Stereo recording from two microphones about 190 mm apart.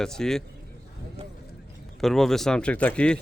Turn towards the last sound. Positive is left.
turn(degrees=5)  # may be behind; listen again after turning